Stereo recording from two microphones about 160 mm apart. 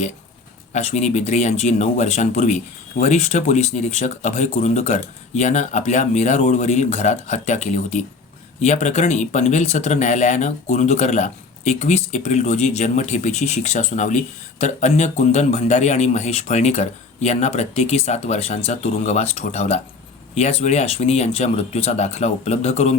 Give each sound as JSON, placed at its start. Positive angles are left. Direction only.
{"t": 0.7, "sound": "speech", "side_deg": 45}